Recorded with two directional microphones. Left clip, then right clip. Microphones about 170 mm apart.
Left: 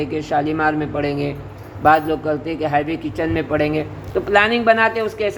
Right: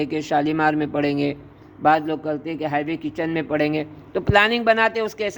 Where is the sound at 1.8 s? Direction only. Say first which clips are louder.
Left 4 dB; 50° right (ahead or behind).